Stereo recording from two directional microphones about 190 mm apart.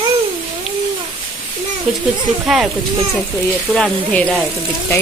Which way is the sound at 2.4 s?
Centre (ahead or behind).